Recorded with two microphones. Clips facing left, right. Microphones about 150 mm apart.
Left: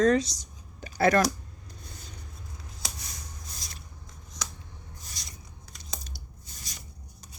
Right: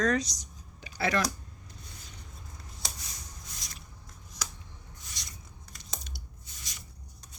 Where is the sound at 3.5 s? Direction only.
35° left (ahead or behind).